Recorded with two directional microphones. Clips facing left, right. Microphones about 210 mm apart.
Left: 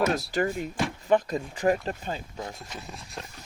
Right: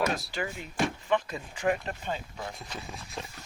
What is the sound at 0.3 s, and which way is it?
Speech, 40° left (ahead or behind).